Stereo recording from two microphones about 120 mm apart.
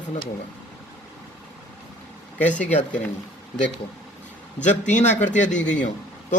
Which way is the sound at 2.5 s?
90° left.